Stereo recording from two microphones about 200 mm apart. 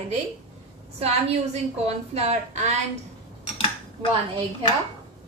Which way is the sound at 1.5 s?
30° right (ahead or behind).